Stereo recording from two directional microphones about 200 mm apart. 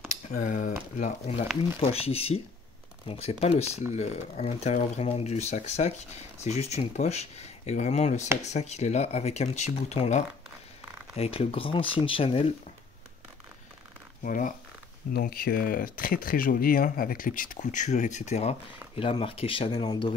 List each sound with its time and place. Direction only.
0.1 s speech: 40° left (ahead or behind)
14.2 s speech: 40° left (ahead or behind); by 20.1 s 25° left (ahead or behind)